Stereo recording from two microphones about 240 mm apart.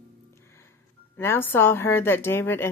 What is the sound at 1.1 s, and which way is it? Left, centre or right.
Speech, centre.